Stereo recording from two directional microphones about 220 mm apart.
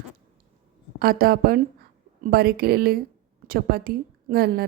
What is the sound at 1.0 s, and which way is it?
A woman's voice, 40° right (ahead or behind).